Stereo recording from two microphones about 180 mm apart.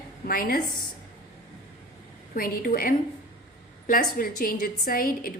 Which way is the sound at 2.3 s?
55° left (ahead or behind).